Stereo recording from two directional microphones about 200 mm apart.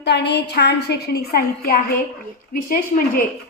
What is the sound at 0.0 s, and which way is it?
A woman's voice, 55° left (ahead or behind).